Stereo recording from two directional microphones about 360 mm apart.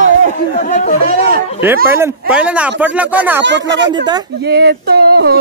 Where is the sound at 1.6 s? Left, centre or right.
Centre.